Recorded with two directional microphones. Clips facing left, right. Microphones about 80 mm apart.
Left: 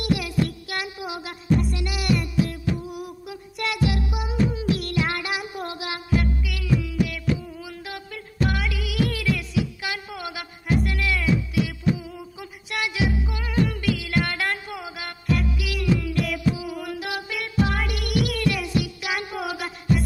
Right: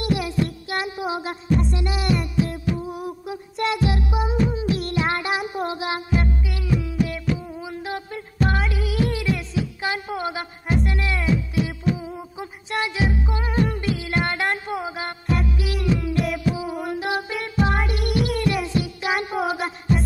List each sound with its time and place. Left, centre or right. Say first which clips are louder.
0.0 s music: right 1 dB; right